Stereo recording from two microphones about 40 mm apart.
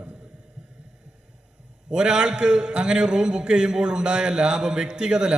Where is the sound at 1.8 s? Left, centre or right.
Centre.